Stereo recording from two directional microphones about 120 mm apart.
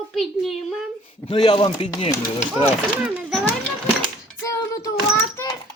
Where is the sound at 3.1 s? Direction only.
5° right (ahead or behind).